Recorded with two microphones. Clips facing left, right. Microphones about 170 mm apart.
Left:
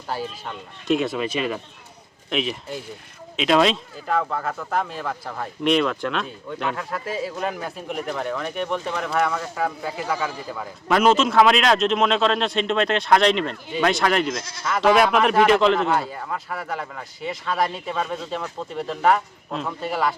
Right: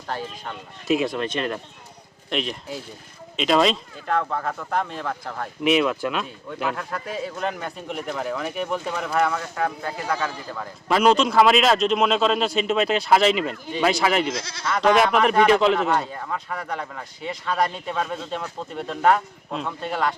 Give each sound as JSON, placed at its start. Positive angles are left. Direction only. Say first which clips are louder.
{"t": 0.1, "sound": "speech", "louder": "left 1 dB", "side_deg": 5}
{"t": 14.3, "sound": "speech", "louder": "even", "side_deg": -70}
{"t": 14.6, "sound": "speech", "louder": "left 1 dB", "side_deg": 5}